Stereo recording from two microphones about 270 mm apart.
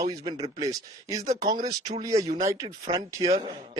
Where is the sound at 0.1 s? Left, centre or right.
Centre.